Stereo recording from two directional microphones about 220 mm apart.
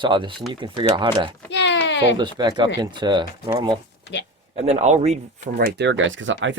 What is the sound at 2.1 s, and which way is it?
Speech, 20° right (ahead or behind).